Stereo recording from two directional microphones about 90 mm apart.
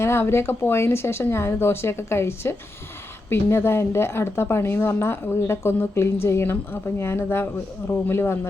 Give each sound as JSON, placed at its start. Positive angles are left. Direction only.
{"t": 0.0, "sound": "a woman's voice", "side_deg": 30}